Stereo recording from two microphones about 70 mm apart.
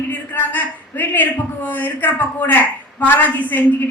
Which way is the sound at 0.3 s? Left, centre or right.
Left.